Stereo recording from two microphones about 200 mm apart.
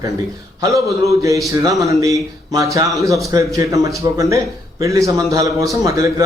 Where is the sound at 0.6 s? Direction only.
15° right (ahead or behind).